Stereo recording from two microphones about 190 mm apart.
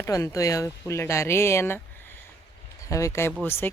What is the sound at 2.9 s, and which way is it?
Speech, 15° left (ahead or behind).